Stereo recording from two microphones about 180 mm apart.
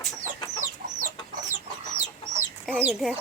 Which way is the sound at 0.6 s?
45° right (ahead or behind).